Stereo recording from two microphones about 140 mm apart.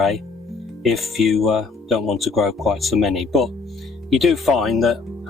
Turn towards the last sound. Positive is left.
turn(degrees=0)  # may be behind; listen again after turning